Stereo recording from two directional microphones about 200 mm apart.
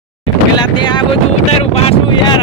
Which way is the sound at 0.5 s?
20° left (ahead or behind).